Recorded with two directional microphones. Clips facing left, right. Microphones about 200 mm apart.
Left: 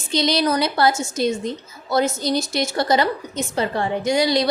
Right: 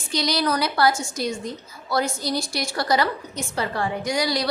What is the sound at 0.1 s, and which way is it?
A woman's voice, 25° left (ahead or behind).